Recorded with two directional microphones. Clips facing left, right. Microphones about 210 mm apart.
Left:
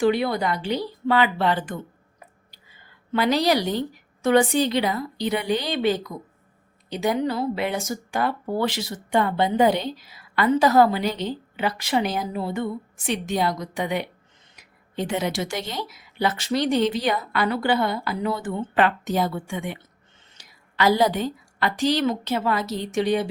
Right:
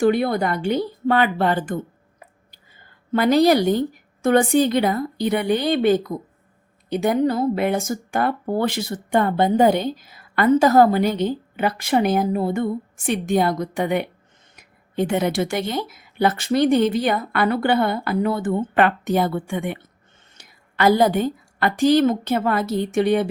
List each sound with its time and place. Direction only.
0.0 s a woman's voice: 50° right (ahead or behind)